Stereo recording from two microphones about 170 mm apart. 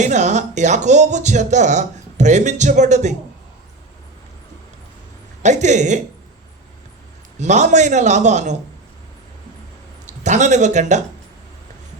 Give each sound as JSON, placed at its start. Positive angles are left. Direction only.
{"t": 0.0, "sound": "speech", "side_deg": -45}
{"t": 5.4, "sound": "speech", "side_deg": -45}
{"t": 7.3, "sound": "speech", "side_deg": -45}
{"t": 10.1, "sound": "a man's voice", "side_deg": -45}